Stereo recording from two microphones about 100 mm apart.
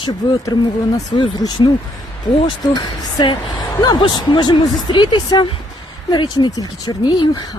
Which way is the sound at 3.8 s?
45° left (ahead or behind).